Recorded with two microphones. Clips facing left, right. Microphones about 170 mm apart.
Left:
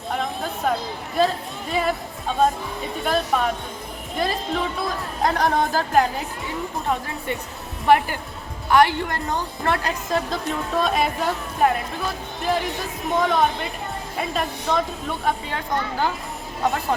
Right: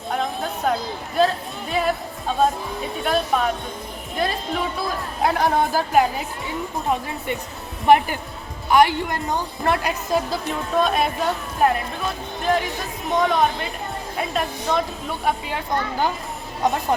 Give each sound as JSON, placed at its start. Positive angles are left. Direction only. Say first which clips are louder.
{"t": 0.1, "sound": "music", "louder": "right 2 dB", "side_deg": 0}
{"t": 3.0, "sound": "speech", "louder": "right 1 dB", "side_deg": 0}
{"t": 7.9, "sound": "a woman's voice", "louder": "right 2 dB", "side_deg": -15}
{"t": 13.1, "sound": "a woman's voice", "louder": "right 1 dB", "side_deg": 0}